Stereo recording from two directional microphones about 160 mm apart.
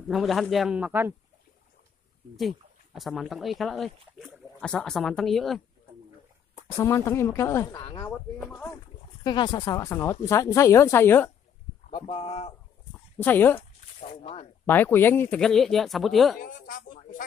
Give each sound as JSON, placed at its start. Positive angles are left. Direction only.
{"t": 0.1, "sound": "speech", "side_deg": 0}
{"t": 2.3, "sound": "speech", "side_deg": 0}
{"t": 6.5, "sound": "speech", "side_deg": 15}
{"t": 8.4, "sound": "speech", "side_deg": 5}
{"t": 9.2, "sound": "speech", "side_deg": 25}
{"t": 11.9, "sound": "speech", "side_deg": 40}
{"t": 13.2, "sound": "speech", "side_deg": 10}
{"t": 13.9, "sound": "speech", "side_deg": 45}
{"t": 14.7, "sound": "speech", "side_deg": 15}
{"t": 16.3, "sound": "speech", "side_deg": 60}